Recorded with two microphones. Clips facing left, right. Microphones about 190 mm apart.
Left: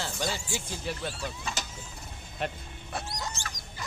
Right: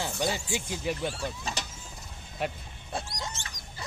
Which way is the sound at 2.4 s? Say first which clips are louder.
Right 1 dB; 10° right (ahead or behind).